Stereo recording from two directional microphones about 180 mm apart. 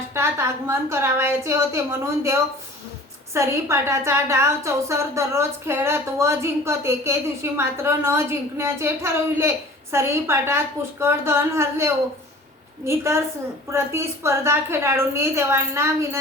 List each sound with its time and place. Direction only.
0.1 s a woman's voice: 15° right (ahead or behind)
3.3 s a woman's voice: 15° right (ahead or behind)